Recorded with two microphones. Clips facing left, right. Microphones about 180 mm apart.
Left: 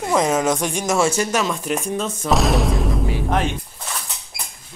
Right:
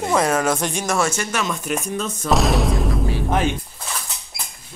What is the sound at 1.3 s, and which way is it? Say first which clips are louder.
Speech: left 3 dB; 35° left (ahead or behind).